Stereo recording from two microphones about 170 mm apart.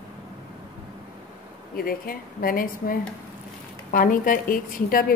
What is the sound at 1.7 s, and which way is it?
A woman's voice, 60° left (ahead or behind).